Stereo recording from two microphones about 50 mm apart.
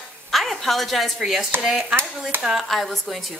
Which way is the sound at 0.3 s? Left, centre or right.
Centre.